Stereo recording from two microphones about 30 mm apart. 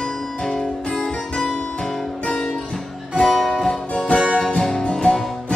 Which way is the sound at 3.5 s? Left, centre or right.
Centre.